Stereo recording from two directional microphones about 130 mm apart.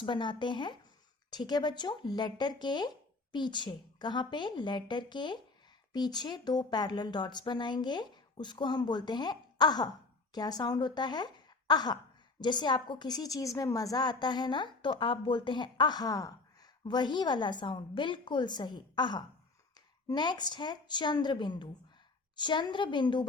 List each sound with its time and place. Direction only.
0.0 s a woman's voice: 40° left (ahead or behind)
11.3 s a sound: 35° left (ahead or behind)
12.4 s a woman's voice: 35° left (ahead or behind)